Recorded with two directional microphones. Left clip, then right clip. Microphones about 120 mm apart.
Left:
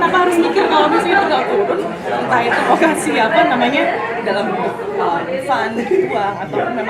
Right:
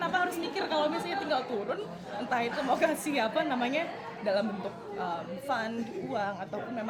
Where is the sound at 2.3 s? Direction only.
30° right (ahead or behind).